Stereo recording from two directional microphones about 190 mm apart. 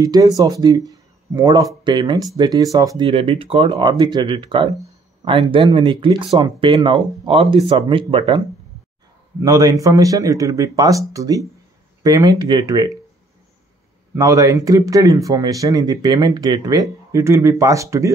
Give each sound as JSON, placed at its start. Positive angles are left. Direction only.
{"t": 0.0, "sound": "speech", "side_deg": -20}
{"t": 3.1, "sound": "speech", "side_deg": -30}
{"t": 9.4, "sound": "speech", "side_deg": -20}
{"t": 14.1, "sound": "speech", "side_deg": -20}